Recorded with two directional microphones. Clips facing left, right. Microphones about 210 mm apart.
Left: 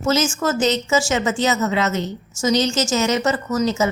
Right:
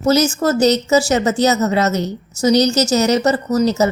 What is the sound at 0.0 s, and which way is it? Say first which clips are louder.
Speech: right 5 dB; 35° right (ahead or behind).